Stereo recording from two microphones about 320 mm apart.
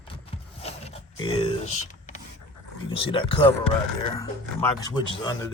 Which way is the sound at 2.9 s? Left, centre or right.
Centre.